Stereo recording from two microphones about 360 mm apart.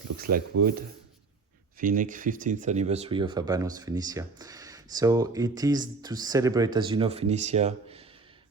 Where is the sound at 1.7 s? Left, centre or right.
Right.